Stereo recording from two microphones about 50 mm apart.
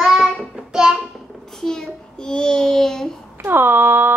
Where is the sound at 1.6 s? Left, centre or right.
Centre.